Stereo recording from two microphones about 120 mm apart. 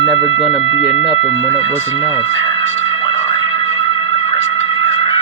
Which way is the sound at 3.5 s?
50° left (ahead or behind).